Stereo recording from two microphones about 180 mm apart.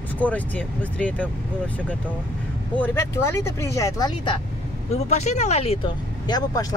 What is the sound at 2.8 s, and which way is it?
Speech, 15° left (ahead or behind).